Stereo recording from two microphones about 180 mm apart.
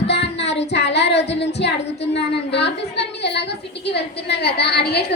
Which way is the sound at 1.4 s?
70° left (ahead or behind).